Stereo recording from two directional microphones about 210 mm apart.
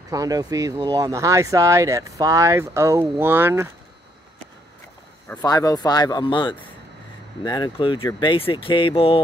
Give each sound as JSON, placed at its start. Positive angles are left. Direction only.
{"t": 0.1, "sound": "speech", "side_deg": -15}
{"t": 5.3, "sound": "speech", "side_deg": 15}